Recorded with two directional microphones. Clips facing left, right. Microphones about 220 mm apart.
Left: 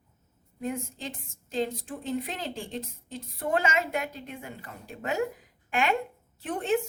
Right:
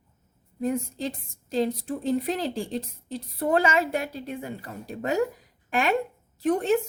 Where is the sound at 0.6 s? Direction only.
35° right (ahead or behind).